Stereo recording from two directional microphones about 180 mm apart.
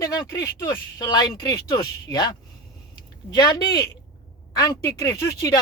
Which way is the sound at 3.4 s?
20° left (ahead or behind).